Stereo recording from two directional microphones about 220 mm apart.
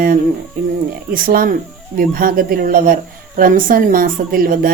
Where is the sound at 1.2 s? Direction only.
40° right (ahead or behind).